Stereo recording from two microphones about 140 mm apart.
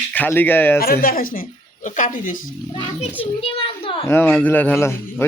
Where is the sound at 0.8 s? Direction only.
90° left; by 2.4 s 75° left (ahead or behind).